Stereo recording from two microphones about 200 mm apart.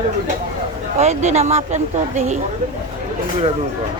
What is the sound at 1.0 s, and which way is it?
Speech, 35° right (ahead or behind).